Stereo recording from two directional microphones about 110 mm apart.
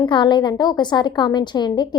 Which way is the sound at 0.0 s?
45° left (ahead or behind).